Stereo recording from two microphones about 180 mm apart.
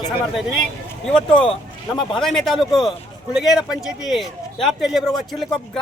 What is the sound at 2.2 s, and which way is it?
A man's voice, centre (ahead or behind).